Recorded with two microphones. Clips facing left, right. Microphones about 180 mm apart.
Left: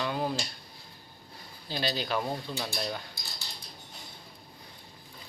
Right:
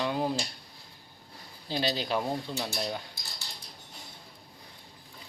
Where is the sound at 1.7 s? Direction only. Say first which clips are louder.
Right 2 dB; 25° right (ahead or behind).